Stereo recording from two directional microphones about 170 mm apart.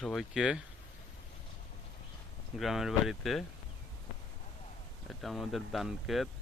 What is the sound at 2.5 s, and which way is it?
Speech, centre (ahead or behind).